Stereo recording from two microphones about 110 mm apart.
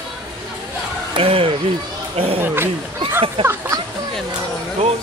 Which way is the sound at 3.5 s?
30° right (ahead or behind).